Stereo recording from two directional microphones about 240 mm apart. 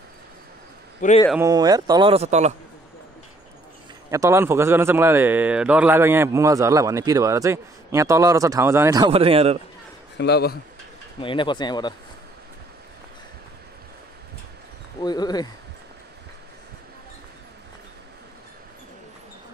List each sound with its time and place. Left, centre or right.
1.3 s a man's voice: centre
4.1 s a man's voice: centre
10.1 s speech: left
11.1 s speech: left
15.0 s speech: centre